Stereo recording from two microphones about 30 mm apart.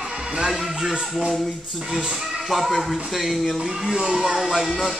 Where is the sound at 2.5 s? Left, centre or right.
Centre.